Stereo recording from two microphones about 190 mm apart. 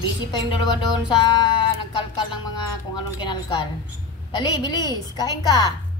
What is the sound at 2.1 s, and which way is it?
A woman's voice, 20° left (ahead or behind).